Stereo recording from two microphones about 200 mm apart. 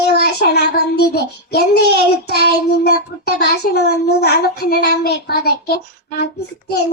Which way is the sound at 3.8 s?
55° left (ahead or behind).